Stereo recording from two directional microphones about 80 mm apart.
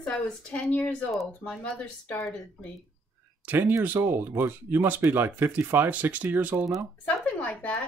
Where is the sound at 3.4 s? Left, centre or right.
Right.